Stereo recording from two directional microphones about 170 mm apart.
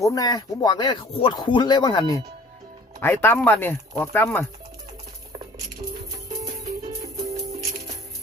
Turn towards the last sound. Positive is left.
turn(degrees=-40)  # may be behind; listen again after turning